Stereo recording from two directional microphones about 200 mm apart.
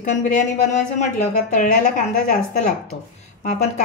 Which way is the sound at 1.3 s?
40° left (ahead or behind).